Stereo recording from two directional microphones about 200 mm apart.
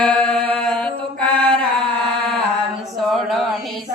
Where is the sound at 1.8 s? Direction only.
5° left (ahead or behind).